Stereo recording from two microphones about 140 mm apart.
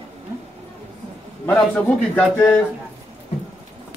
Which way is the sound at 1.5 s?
10° left (ahead or behind).